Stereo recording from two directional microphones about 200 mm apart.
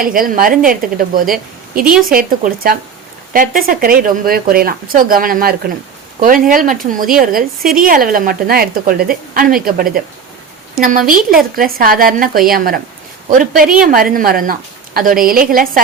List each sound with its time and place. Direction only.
0.0 s speech: 45° right (ahead or behind)
11.2 s a woman's voice: centre (ahead or behind)
11.5 s speech: 45° right (ahead or behind)
13.8 s speech: 45° right (ahead or behind)